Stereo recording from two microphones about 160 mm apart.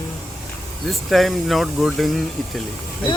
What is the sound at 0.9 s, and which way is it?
Speech, centre (ahead or behind).